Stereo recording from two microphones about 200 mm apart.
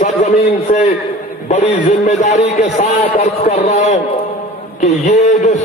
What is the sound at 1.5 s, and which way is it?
A man's voice, 35° left (ahead or behind).